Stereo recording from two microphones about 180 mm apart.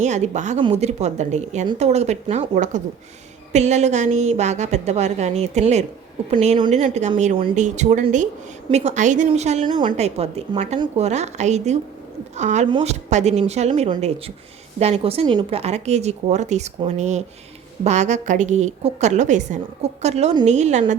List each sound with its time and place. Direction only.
0.0 s a woman's voice: 40° right (ahead or behind)
9.6 s a woman's voice: 25° right (ahead or behind)
10.0 s speech: 35° right (ahead or behind)